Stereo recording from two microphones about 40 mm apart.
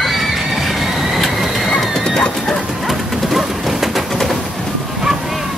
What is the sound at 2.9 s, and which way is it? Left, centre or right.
Pigeon, centre.